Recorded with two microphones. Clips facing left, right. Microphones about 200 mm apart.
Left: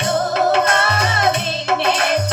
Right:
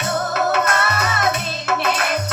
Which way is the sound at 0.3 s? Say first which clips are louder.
Left 2 dB; 30° left (ahead or behind).